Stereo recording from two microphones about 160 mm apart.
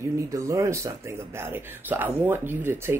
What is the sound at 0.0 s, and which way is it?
Speech, 20° right (ahead or behind).